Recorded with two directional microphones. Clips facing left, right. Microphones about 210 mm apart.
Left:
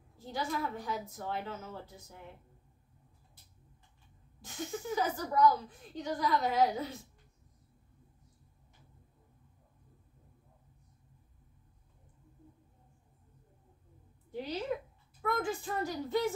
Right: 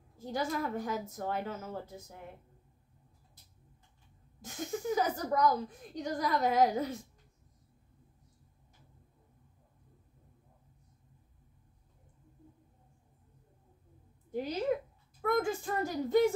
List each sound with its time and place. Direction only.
0.2 s a woman's voice: 45° right (ahead or behind)
4.5 s a woman's voice: 45° right (ahead or behind)
14.3 s a woman's voice: 45° right (ahead or behind)